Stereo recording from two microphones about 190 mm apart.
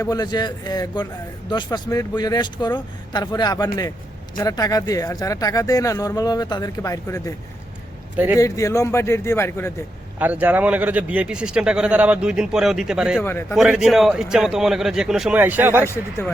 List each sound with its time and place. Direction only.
0.0 s speech: 20° left (ahead or behind)
8.1 s a man's voice: 10° right (ahead or behind)
8.4 s a man's voice: 15° left (ahead or behind)
10.2 s a man's voice: 10° right (ahead or behind)
13.2 s a man's voice: 10° left (ahead or behind)
13.6 s a man's voice: 5° right (ahead or behind)